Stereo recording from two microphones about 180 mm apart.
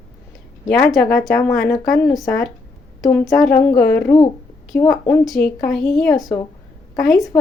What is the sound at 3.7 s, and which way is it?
Speech, 60° left (ahead or behind).